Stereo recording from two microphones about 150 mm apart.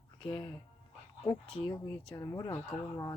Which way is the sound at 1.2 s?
20° left (ahead or behind).